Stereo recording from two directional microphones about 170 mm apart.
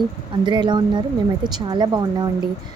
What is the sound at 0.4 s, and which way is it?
A woman's voice, 25° right (ahead or behind).